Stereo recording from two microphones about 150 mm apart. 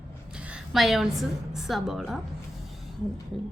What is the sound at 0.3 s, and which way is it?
A woman's voice, 5° right (ahead or behind).